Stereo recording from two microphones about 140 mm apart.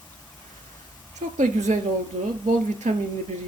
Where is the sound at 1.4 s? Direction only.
60° right (ahead or behind).